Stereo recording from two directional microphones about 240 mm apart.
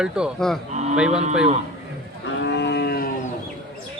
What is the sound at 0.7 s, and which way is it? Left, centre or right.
Cattle, right.